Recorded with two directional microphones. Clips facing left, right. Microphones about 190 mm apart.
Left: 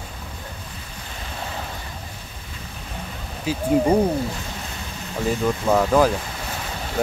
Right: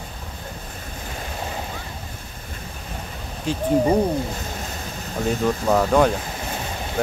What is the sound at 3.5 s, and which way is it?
Speech, 5° left (ahead or behind).